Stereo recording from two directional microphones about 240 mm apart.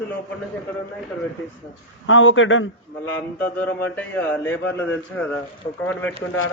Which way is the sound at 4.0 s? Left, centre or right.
Centre.